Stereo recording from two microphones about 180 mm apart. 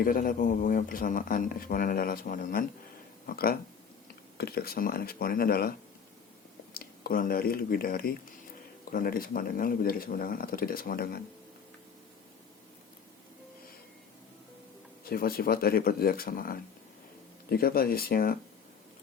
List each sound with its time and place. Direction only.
0.0 s speech: 50° left (ahead or behind)
6.7 s speech: 55° left (ahead or behind)
15.0 s speech: 55° left (ahead or behind)